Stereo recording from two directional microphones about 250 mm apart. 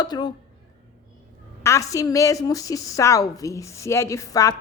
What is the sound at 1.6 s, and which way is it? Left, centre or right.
A woman's voice, centre.